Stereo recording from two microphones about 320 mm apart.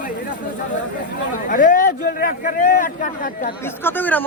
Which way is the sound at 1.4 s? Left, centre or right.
Left.